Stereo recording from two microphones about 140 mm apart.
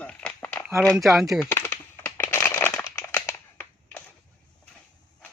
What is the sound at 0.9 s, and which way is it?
Speech, centre (ahead or behind).